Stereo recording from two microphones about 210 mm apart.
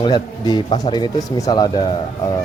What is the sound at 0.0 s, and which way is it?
Speech, 20° left (ahead or behind).